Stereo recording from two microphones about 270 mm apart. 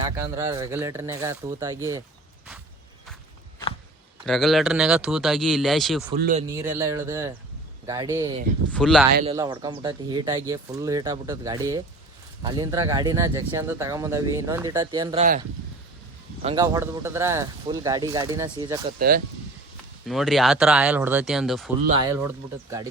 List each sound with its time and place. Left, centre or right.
0.0 s speech: centre
4.3 s speech: centre
6.1 s speech: right
6.7 s speech: centre
8.7 s speech: centre
9.2 s speech: centre
15.2 s speech: right
18.9 s speech: right
20.1 s speech: centre
21.8 s speech: centre